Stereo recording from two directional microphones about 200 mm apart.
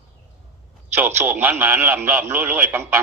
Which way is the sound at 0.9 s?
10° right (ahead or behind).